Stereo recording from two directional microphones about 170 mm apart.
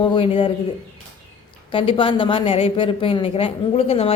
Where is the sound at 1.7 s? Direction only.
30° left (ahead or behind).